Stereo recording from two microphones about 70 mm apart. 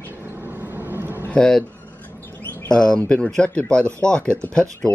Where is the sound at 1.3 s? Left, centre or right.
Centre.